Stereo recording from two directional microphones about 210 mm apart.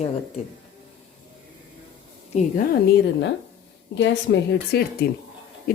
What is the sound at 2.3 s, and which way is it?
Speech, 30° left (ahead or behind).